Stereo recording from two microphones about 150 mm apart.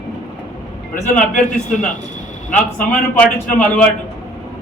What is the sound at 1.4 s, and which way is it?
Speech, 60° left (ahead or behind).